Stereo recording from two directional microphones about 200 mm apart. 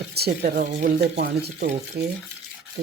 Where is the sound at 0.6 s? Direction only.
40° right (ahead or behind).